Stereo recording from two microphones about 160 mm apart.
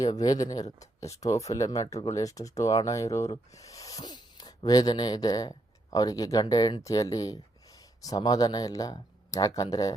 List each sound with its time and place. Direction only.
0.0 s speech: 25° left (ahead or behind)